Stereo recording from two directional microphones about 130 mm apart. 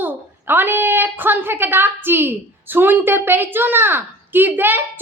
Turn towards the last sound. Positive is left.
turn(degrees=-15)  # may be behind; listen again after turning